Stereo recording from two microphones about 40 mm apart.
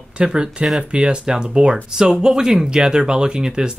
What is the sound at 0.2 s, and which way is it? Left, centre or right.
Speech, right.